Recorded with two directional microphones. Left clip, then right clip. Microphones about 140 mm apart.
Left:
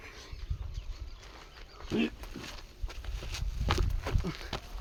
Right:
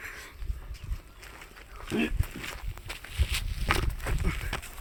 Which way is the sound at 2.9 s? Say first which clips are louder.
Right 9 dB; 70° left (ahead or behind).